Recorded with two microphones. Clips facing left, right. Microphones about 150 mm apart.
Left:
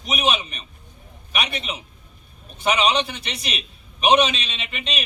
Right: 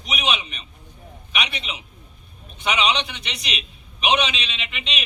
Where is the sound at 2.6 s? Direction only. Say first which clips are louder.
Left 3 dB; 45° left (ahead or behind).